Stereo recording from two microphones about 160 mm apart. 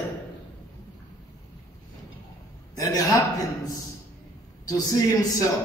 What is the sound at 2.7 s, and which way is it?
Speech, 20° left (ahead or behind).